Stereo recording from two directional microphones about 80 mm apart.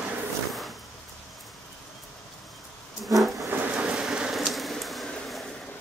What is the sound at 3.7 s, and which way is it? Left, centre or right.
Rain, centre.